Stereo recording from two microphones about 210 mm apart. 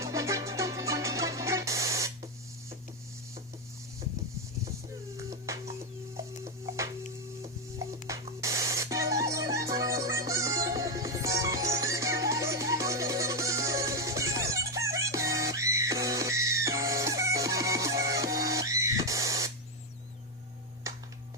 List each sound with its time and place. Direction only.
0.0 s music: 15° right (ahead or behind)
5.1 s music: 15° right (ahead or behind)
8.4 s music: 15° right (ahead or behind)